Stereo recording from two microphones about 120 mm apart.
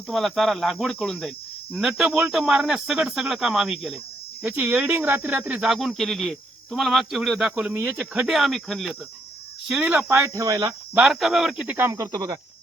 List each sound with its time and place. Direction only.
0.1 s speech: centre (ahead or behind)
1.7 s speech: 10° right (ahead or behind)
4.4 s speech: 15° right (ahead or behind); by 9.0 s centre (ahead or behind)
9.6 s speech: 10° right (ahead or behind)
10.4 s speech: 30° right (ahead or behind)
10.9 s speech: 5° right (ahead or behind)
11.8 s speech: 25° right (ahead or behind)